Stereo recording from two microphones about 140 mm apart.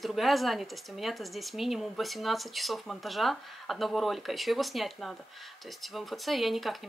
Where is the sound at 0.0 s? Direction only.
Centre (ahead or behind).